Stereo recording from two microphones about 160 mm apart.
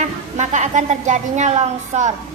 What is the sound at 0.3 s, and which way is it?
A woman's voice, 50° right (ahead or behind).